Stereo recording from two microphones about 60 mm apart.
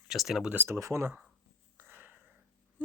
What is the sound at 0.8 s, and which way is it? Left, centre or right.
Speech, right.